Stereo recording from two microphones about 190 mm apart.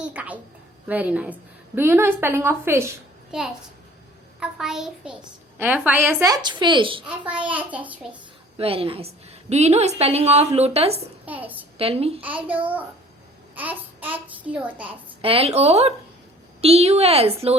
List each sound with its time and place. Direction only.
0.0 s a woman's voice: 5° right (ahead or behind); by 7.1 s 25° right (ahead or behind)
7.1 s a woman's voice: 5° right (ahead or behind)
8.5 s a woman's voice: 30° right (ahead or behind)
11.3 s a woman's voice: 10° right (ahead or behind)
11.8 s a woman's voice: 30° right (ahead or behind)
13.6 s a woman's voice: 10° right (ahead or behind)
15.2 s a woman's voice: 30° right (ahead or behind)